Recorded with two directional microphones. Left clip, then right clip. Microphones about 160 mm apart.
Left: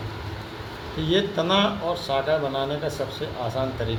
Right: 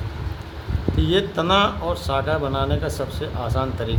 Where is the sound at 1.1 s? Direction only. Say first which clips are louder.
Right 3 dB; 35° right (ahead or behind).